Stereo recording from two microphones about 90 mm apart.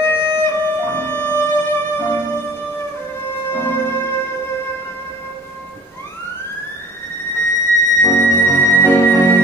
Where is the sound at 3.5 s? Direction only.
25° left (ahead or behind).